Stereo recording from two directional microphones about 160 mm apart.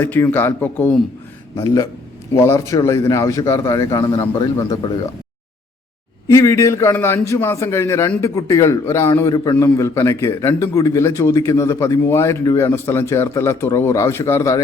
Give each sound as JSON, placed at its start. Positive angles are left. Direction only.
{"t": 0.0, "sound": "a man's voice", "side_deg": 15}
{"t": 1.5, "sound": "a man's voice", "side_deg": 20}
{"t": 6.2, "sound": "a man's voice", "side_deg": 20}